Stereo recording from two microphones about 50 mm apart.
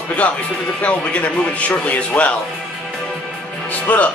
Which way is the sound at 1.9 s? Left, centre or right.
Left.